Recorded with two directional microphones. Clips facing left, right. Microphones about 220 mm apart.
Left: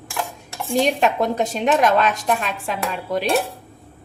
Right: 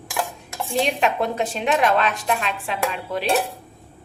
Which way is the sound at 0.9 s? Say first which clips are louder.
Left 2 dB; 40° left (ahead or behind).